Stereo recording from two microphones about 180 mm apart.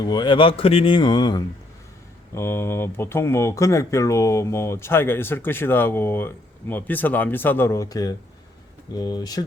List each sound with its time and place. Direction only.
0.0 s speech: 25° left (ahead or behind)